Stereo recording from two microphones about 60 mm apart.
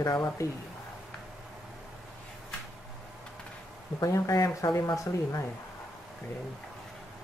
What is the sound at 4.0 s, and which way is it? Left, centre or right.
Speech, left.